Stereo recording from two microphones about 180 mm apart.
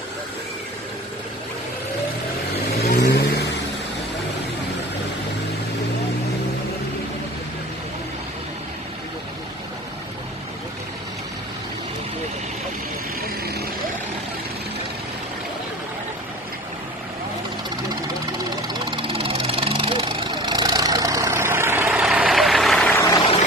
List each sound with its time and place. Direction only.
2.8 s vehicle: 65° left (ahead or behind)
13.2 s vehicle: 60° right (ahead or behind)
17.8 s vehicle: 25° right (ahead or behind); by 23.2 s 15° left (ahead or behind)